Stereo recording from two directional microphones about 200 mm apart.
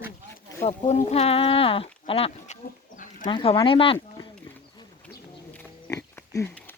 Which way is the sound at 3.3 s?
25° left (ahead or behind).